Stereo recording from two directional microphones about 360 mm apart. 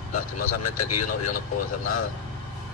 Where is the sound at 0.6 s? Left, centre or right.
Left.